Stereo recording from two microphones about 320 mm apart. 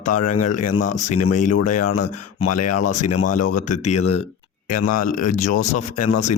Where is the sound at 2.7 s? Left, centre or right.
Left.